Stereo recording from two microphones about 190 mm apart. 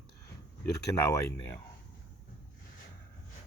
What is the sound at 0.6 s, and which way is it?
Speech, 15° left (ahead or behind).